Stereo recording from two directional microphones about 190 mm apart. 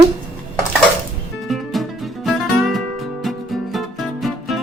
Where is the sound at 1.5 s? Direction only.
Centre (ahead or behind).